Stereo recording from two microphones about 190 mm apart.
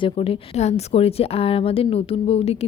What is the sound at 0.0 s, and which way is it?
A woman's voice, 30° left (ahead or behind).